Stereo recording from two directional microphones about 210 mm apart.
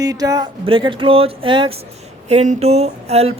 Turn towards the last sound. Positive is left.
turn(degrees=-30)  # may be behind; listen again after turning